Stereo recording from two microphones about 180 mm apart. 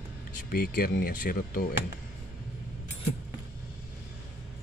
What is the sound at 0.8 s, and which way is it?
Speech, 55° left (ahead or behind).